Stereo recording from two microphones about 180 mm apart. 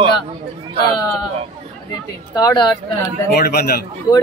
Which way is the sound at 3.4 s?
60° left (ahead or behind).